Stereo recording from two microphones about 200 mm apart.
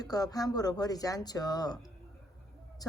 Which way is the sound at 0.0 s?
20° left (ahead or behind).